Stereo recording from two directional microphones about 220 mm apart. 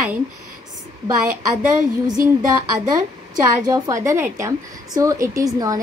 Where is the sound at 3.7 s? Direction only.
15° right (ahead or behind).